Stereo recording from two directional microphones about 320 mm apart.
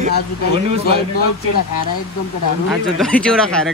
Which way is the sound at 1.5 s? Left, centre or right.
Left.